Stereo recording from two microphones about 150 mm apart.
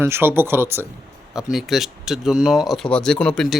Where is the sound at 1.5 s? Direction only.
Centre (ahead or behind).